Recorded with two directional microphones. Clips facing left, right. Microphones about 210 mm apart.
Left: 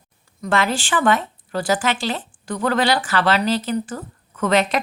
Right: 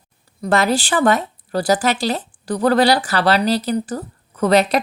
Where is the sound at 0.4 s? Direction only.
40° right (ahead or behind).